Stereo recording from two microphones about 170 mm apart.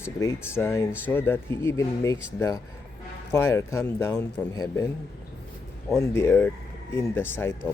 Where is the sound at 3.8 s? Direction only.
5° left (ahead or behind).